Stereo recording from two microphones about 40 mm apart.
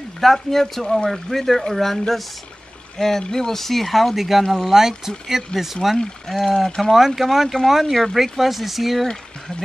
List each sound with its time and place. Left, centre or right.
0.2 s speech: centre
6.2 s speech: centre